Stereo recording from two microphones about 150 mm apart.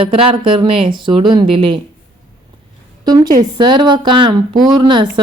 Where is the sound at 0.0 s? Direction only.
35° right (ahead or behind).